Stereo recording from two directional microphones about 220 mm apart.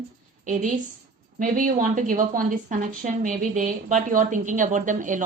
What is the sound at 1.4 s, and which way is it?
A woman's voice, 35° right (ahead or behind).